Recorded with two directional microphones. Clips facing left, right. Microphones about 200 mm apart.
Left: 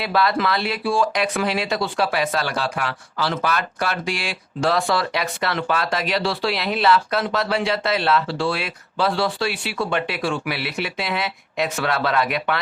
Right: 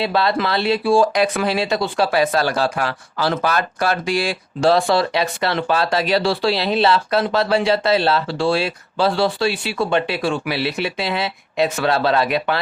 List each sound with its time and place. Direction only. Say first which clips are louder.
0.0 s speech: right 2 dB; 25° right (ahead or behind)